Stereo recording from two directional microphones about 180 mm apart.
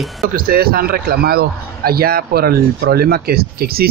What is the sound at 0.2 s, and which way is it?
A man's voice, 55° right (ahead or behind).